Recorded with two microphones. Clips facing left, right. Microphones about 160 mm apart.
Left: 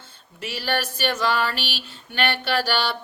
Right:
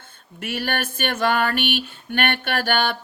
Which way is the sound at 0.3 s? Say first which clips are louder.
Right 1 dB; 55° right (ahead or behind).